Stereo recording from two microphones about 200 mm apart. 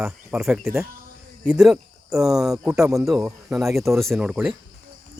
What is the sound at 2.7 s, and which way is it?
Speech, 15° right (ahead or behind).